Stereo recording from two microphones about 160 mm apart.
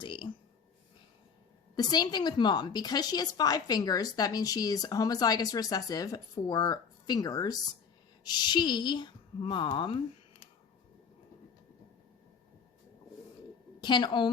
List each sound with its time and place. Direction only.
0.0 s a sound: 30° left (ahead or behind)
1.7 s a woman's voice: 25° left (ahead or behind)
13.8 s a woman's voice: 30° left (ahead or behind)